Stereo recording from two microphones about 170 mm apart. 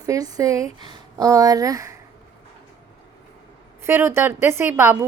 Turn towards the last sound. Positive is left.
turn(degrees=-15)  # may be behind; listen again after turning